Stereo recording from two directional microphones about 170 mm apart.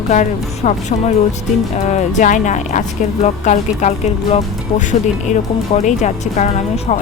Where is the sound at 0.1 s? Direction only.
45° left (ahead or behind).